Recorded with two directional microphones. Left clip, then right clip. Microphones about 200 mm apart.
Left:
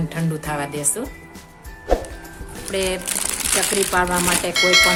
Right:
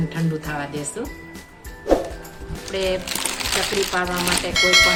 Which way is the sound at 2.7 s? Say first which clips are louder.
Even; 55° left (ahead or behind).